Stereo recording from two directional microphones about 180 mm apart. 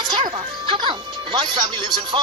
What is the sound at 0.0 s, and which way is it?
Speech, 25° right (ahead or behind).